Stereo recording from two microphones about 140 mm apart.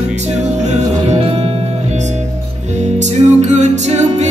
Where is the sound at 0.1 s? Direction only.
55° right (ahead or behind).